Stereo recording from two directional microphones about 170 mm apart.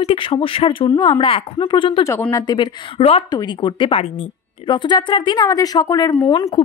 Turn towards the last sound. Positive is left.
turn(degrees=20)  # may be behind; listen again after turning